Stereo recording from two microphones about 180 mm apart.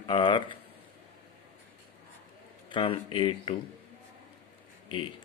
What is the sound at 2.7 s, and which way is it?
Speech, 30° left (ahead or behind).